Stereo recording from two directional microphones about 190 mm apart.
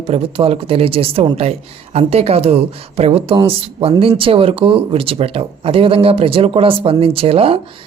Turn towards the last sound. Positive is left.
turn(degrees=-30)  # may be behind; listen again after turning